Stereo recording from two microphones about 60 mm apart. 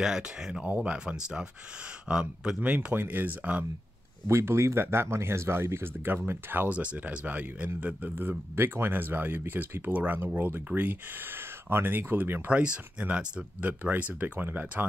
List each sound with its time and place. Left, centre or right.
0.0 s speech: centre
2.6 s speech: right
4.3 s speech: right
6.7 s speech: right
12.4 s speech: right